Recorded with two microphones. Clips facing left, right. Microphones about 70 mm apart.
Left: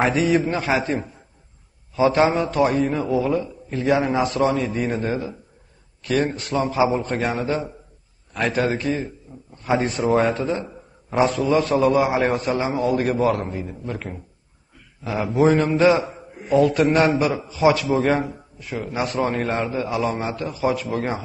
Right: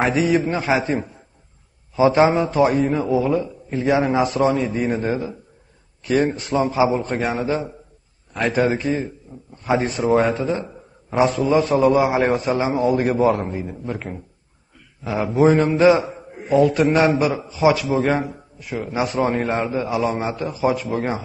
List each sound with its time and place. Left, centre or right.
0.0 s a man's voice: centre
6.7 s a man's voice: centre
11.3 s a man's voice: centre
17.0 s a man's voice: centre